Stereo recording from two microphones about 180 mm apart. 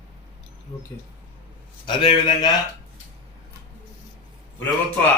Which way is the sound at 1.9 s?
30° left (ahead or behind).